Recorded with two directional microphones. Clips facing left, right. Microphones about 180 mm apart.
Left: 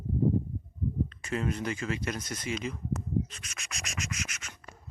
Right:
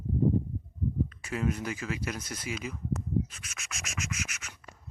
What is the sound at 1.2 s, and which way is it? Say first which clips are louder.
Speech: left 1 dB; 5° right (ahead or behind).